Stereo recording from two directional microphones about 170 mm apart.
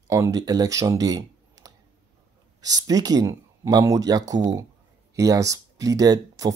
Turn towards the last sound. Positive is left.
turn(degrees=-20)  # may be behind; listen again after turning